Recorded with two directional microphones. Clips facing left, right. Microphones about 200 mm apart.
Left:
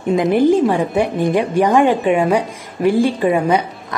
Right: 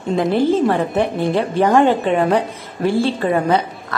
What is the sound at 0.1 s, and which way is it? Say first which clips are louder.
A woman's voice: left 3 dB; 15° left (ahead or behind).